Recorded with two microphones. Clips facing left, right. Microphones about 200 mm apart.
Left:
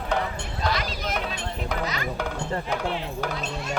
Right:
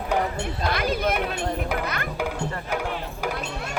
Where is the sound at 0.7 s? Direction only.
55° right (ahead or behind).